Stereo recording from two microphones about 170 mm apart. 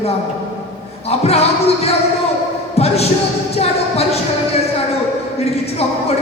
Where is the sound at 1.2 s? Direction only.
35° left (ahead or behind).